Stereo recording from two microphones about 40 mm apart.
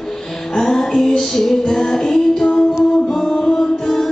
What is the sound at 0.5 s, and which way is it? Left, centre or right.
Music, centre.